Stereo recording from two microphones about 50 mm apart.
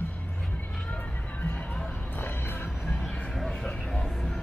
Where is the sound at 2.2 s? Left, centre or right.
Left.